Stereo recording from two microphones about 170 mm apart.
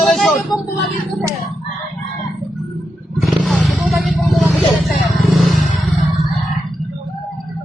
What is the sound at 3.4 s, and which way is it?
Vehicle, centre (ahead or behind).